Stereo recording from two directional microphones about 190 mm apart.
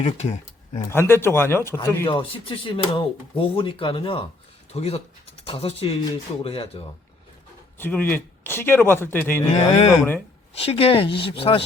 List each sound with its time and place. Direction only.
0.0 s speech: 35° left (ahead or behind)
0.9 s speech: 15° left (ahead or behind)
2.0 s speech: 25° left (ahead or behind)
7.8 s speech: 10° left (ahead or behind)
9.5 s speech: 35° left (ahead or behind)